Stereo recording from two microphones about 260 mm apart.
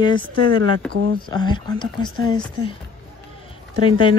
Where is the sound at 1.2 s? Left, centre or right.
Centre.